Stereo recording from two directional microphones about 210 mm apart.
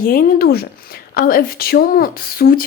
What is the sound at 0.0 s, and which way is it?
Speech, 45° left (ahead or behind).